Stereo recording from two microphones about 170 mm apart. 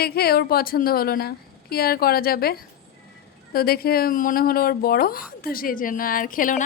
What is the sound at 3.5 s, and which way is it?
Speech, 65° left (ahead or behind).